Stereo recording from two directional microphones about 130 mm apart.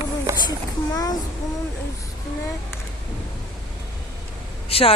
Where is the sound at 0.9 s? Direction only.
30° left (ahead or behind).